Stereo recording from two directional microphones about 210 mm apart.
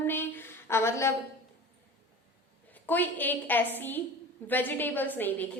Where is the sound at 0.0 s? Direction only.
10° left (ahead or behind).